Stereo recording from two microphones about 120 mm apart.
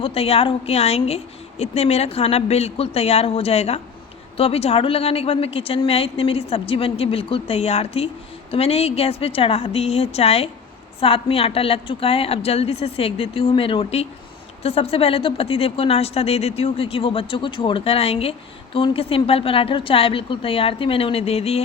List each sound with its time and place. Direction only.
0.0 s a woman's voice: 55° left (ahead or behind)